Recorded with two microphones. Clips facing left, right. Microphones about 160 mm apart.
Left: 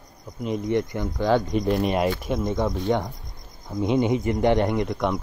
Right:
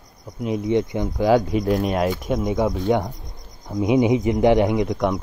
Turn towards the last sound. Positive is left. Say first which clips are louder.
# right 3 dB
turn(degrees=-10)  # may be behind; listen again after turning